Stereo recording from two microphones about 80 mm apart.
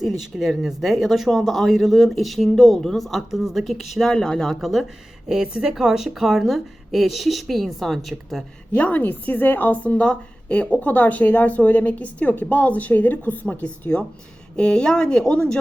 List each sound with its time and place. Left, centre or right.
0.0 s speech: centre
8.7 s a woman's voice: centre